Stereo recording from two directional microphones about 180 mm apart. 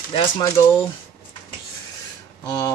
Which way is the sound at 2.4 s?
20° left (ahead or behind).